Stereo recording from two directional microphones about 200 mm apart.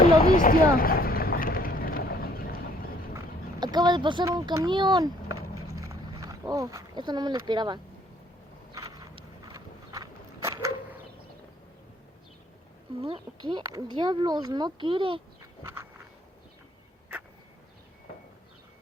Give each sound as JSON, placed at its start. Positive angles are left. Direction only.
{"t": 0.0, "sound": "vehicle", "side_deg": 45}
{"t": 3.2, "sound": "speech", "side_deg": -20}
{"t": 5.7, "sound": "roaring cats", "side_deg": -15}
{"t": 8.7, "sound": "biting", "side_deg": -15}
{"t": 13.0, "sound": "speech", "side_deg": -25}